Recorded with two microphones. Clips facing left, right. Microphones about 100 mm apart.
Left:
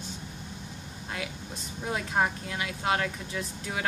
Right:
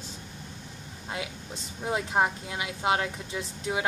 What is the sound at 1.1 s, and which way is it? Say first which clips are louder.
A woman's voice: right 1 dB; 20° right (ahead or behind).